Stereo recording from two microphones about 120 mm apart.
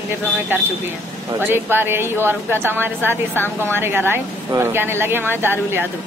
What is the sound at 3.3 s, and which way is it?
Speech, 15° left (ahead or behind).